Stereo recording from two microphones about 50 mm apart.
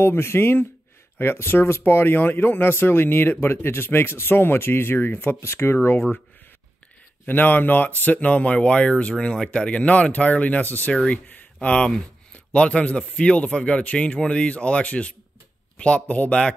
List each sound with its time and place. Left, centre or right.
0.0 s speech: left
5.4 s speech: left
7.2 s speech: left
10.9 s speech: left